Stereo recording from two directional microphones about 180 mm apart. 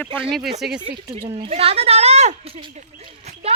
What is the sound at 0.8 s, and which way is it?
Speech, 25° right (ahead or behind).